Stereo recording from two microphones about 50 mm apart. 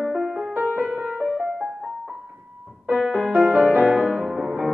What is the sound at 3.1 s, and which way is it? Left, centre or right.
Music, right.